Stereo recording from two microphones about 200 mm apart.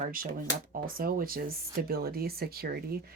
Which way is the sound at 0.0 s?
45° right (ahead or behind).